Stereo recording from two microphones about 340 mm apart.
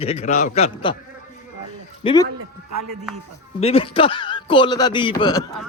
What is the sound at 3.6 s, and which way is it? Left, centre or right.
Speech, centre.